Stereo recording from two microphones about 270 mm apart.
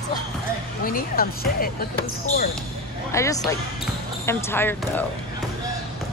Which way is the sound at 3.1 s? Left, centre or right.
Centre.